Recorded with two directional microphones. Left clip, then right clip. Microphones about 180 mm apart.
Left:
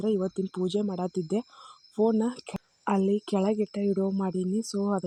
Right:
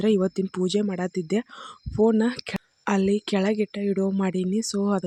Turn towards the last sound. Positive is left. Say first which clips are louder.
# right 4 dB
turn(degrees=-20)  # may be behind; listen again after turning